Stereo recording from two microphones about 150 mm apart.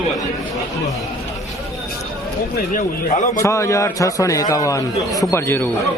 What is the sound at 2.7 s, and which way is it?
Speech, 55° left (ahead or behind).